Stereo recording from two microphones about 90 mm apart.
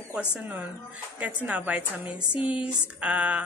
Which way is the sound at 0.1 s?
15° right (ahead or behind).